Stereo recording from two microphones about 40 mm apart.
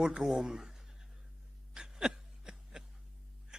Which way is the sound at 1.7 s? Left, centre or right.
Centre.